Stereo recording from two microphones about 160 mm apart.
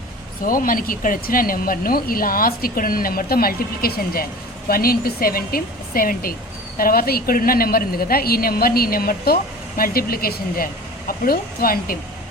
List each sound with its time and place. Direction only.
0.4 s a woman's voice: 60° left (ahead or behind)